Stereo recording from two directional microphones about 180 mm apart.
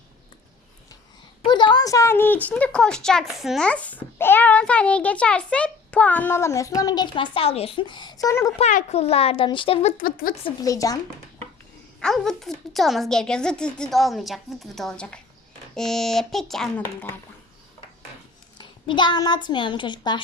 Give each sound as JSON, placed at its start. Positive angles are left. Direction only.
{"t": 1.4, "sound": "a woman's voice", "side_deg": 25}
{"t": 8.5, "sound": "a child's voice", "side_deg": 40}
{"t": 10.0, "sound": "speech", "side_deg": 50}
{"t": 10.4, "sound": "speech", "side_deg": 20}
{"t": 11.9, "sound": "a woman's voice", "side_deg": 0}
{"t": 16.8, "sound": "a woman's voice", "side_deg": 10}
{"t": 18.5, "sound": "a child's voice", "side_deg": 25}